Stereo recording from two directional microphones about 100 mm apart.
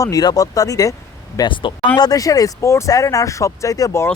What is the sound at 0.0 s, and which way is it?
Speech, 40° left (ahead or behind).